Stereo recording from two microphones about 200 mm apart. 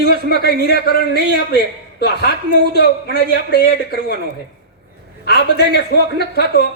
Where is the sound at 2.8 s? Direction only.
55° left (ahead or behind).